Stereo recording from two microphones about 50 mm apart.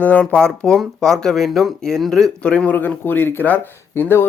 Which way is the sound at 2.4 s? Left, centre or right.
Left.